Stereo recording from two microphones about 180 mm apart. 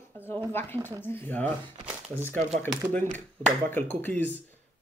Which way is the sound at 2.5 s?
5° left (ahead or behind).